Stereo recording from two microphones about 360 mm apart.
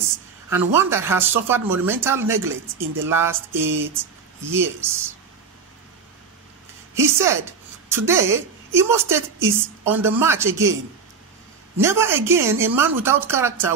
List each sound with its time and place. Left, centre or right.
0.5 s a woman's voice: centre
7.0 s a woman's voice: centre